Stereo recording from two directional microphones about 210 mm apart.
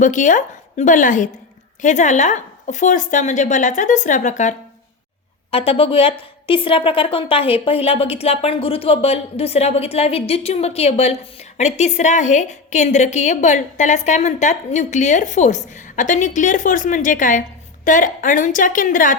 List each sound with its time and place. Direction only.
0.0 s a woman's voice: 35° left (ahead or behind)